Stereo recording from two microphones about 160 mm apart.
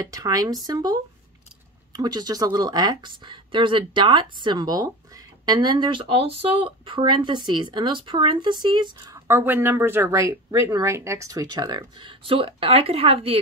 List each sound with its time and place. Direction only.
0.1 s speech: 20° right (ahead or behind)
9.3 s speech: 15° right (ahead or behind); by 13.4 s 40° right (ahead or behind)